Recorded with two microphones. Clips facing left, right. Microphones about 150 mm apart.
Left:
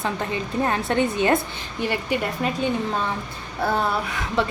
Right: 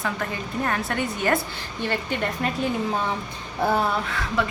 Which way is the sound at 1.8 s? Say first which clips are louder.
Left 2 dB; 5° left (ahead or behind).